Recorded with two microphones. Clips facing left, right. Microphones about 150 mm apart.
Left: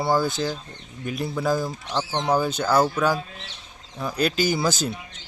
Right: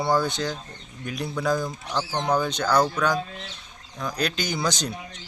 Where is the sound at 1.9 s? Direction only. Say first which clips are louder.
Left 1 dB; 20° left (ahead or behind).